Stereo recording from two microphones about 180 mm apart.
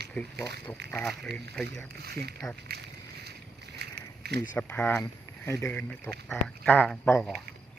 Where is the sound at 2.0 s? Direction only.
60° right (ahead or behind).